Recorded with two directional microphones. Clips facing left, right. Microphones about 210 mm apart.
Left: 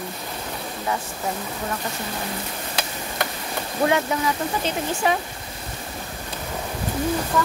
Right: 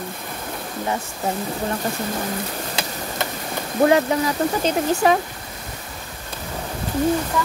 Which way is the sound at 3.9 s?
40° right (ahead or behind).